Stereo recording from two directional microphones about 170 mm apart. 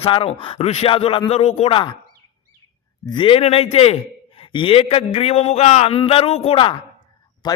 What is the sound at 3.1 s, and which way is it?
A man's voice, 30° left (ahead or behind).